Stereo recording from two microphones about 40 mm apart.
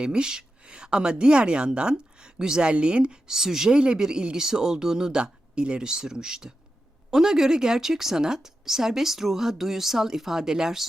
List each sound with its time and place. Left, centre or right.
0.0 s a woman's voice: right